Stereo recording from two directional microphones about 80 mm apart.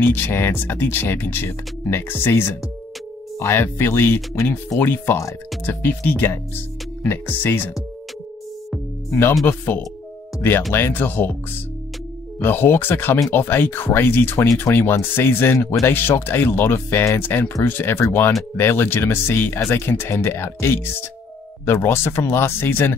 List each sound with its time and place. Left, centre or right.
0.0 s speech: left
5.9 s speech: left
9.5 s speech: left
12.4 s speech: left